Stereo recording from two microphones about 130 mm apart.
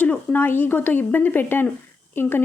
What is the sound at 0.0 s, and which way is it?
Speech, 10° left (ahead or behind).